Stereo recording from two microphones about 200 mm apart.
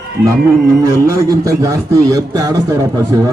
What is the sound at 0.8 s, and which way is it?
A man's voice, 15° right (ahead or behind).